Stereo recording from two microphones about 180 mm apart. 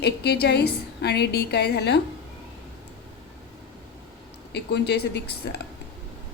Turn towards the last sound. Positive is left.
turn(degrees=65)  # may be behind; listen again after turning